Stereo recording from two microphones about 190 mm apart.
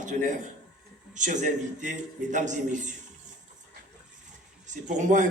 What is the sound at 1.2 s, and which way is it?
A man's voice, 40° right (ahead or behind).